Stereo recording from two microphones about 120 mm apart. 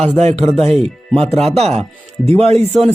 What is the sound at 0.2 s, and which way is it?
Speech, 65° right (ahead or behind).